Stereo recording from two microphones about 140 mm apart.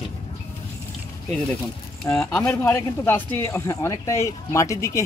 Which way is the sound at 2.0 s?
5° left (ahead or behind).